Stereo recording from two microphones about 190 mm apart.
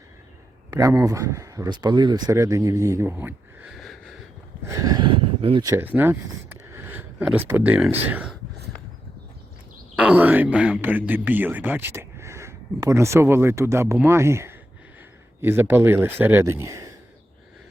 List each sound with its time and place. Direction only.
0.7 s speech: 20° right (ahead or behind); by 4.2 s centre (ahead or behind)
4.6 s a sound: 20° right (ahead or behind)
5.6 s speech: 10° right (ahead or behind)
6.7 s a sound: 10° right (ahead or behind)
8.0 s speech: 5° right (ahead or behind)
9.9 s speech: 5° right (ahead or behind)